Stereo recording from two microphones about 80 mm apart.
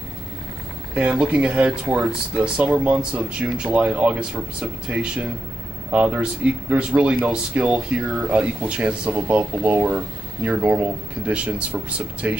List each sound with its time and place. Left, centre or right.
0.9 s speech: centre